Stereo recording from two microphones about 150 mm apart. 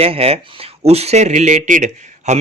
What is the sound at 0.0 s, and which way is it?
Speech, 40° right (ahead or behind).